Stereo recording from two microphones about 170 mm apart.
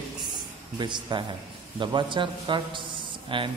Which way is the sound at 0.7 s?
25° right (ahead or behind).